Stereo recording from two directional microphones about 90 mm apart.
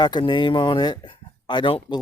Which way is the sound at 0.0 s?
60° left (ahead or behind).